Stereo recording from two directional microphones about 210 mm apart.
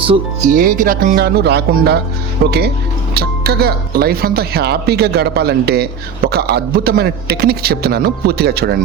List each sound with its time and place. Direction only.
0.0 s speech: 25° right (ahead or behind)
0.5 s speech: 40° right (ahead or behind)